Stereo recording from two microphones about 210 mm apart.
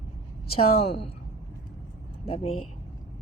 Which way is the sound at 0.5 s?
30° left (ahead or behind).